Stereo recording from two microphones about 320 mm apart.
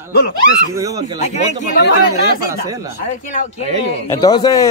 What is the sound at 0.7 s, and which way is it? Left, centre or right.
Speech, centre.